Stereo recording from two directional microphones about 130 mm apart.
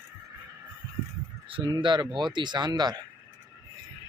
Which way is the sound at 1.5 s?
35° right (ahead or behind).